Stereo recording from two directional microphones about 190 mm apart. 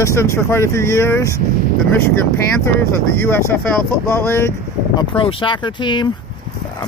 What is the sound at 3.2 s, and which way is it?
Speech, 10° left (ahead or behind).